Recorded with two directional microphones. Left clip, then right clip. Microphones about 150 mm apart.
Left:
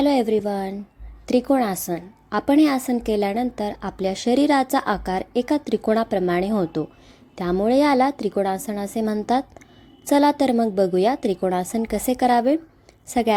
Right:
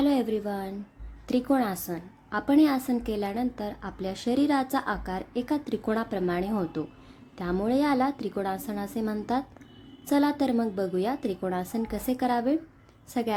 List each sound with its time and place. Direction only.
0.0 s a woman's voice: 40° left (ahead or behind)